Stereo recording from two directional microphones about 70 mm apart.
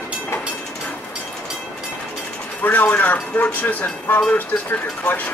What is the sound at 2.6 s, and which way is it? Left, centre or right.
Speech, left.